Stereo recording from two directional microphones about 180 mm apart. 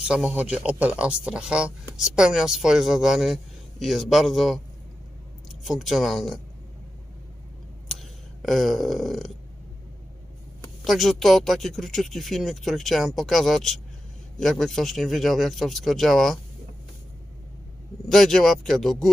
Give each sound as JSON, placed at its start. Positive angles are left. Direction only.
{"t": 0.0, "sound": "speech", "side_deg": -5}
{"t": 5.6, "sound": "speech", "side_deg": 0}
{"t": 7.9, "sound": "a sound", "side_deg": 0}
{"t": 10.8, "sound": "speech", "side_deg": 0}
{"t": 18.1, "sound": "speech", "side_deg": 0}